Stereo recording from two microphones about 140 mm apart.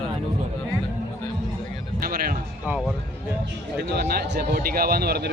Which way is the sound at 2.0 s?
90° right.